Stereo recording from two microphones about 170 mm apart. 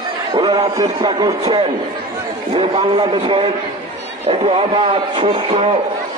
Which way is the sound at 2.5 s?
30° right (ahead or behind).